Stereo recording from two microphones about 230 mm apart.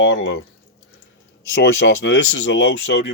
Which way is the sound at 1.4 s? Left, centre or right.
Left.